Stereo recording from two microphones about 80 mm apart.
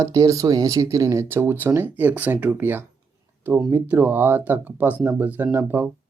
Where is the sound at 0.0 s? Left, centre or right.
Right.